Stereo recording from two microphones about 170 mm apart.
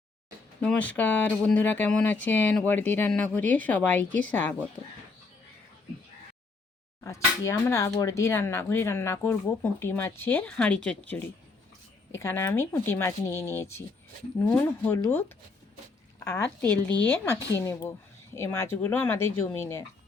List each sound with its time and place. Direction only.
0.6 s speech: 5° left (ahead or behind)
7.0 s speech: 15° left (ahead or behind)